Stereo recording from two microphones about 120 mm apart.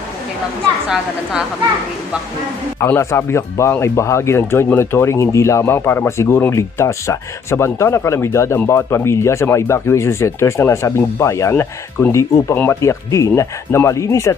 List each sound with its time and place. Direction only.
2.8 s speech: 25° left (ahead or behind)